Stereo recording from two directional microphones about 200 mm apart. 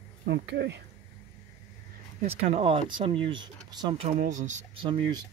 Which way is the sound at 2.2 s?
30° right (ahead or behind).